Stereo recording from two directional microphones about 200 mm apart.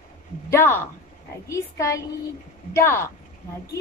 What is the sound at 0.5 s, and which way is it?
A woman's voice, 10° left (ahead or behind).